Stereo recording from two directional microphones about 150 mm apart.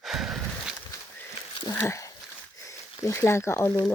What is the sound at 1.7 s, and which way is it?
Speech, 20° left (ahead or behind).